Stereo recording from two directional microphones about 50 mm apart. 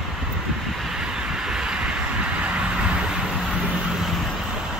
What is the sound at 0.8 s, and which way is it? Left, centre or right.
Vehicle, centre.